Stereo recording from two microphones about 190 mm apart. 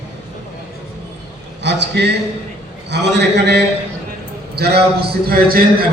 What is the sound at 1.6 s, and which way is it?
A man's voice, 65° right (ahead or behind).